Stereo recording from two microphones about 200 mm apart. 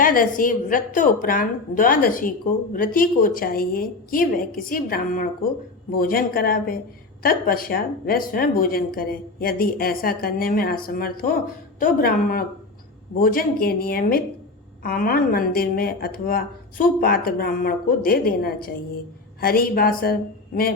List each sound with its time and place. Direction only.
0.0 s a woman's voice: 45° left (ahead or behind)